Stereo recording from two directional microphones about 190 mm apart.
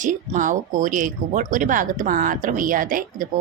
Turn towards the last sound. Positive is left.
turn(degrees=-45)  # may be behind; listen again after turning